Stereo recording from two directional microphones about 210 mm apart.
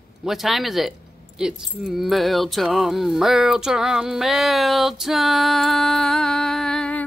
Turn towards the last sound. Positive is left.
turn(degrees=5)  # may be behind; listen again after turning